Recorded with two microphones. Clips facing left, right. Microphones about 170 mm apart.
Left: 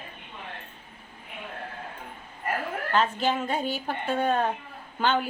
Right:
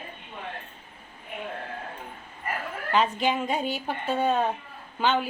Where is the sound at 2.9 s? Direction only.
10° right (ahead or behind).